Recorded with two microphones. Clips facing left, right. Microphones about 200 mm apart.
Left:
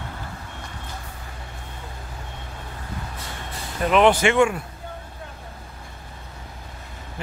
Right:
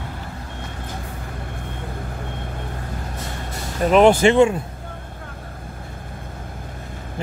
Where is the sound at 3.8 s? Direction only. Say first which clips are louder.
Right 4 dB; 35° right (ahead or behind).